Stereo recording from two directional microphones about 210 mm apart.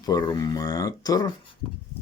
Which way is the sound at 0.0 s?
20° left (ahead or behind).